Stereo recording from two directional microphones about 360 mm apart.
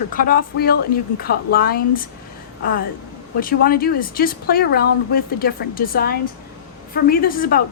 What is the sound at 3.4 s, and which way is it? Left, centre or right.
Speech, left.